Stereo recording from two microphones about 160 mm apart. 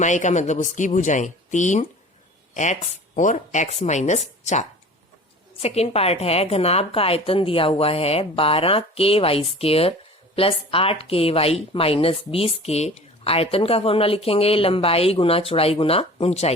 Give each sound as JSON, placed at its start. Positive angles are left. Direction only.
{"t": 0.0, "sound": "speech", "side_deg": 50}
{"t": 3.2, "sound": "speech", "side_deg": 50}